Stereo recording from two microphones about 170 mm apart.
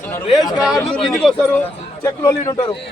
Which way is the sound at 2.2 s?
25° left (ahead or behind).